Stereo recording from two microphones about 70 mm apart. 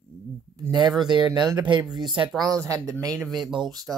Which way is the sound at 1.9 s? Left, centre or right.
Right.